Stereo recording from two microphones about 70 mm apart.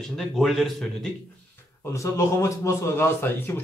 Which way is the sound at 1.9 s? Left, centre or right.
Left.